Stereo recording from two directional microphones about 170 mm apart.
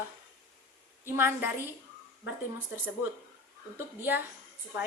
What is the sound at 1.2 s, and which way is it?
Speech, 15° right (ahead or behind).